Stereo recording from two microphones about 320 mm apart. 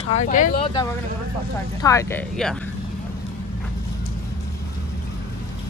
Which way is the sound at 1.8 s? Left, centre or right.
Centre.